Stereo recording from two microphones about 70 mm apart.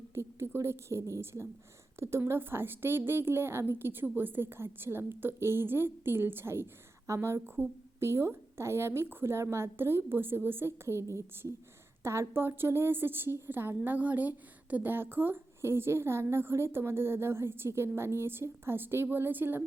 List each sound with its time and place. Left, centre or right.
0.1 s a woman's voice: right
12.3 s a woman's voice: right